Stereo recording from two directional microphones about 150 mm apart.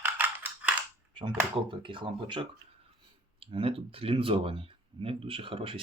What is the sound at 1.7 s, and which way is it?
Speech, 35° right (ahead or behind).